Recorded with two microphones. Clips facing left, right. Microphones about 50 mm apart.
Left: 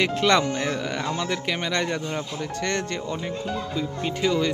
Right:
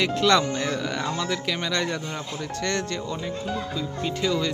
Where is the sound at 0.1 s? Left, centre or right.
Centre.